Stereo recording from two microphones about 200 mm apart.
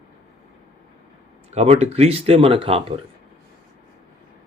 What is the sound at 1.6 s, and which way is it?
Speech, 35° right (ahead or behind).